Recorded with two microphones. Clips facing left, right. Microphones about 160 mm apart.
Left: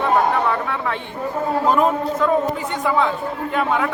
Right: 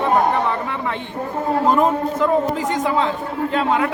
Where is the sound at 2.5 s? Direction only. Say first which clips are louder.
Right 4 dB; 90° right.